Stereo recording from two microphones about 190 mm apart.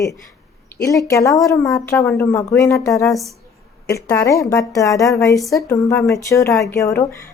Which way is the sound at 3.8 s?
15° left (ahead or behind).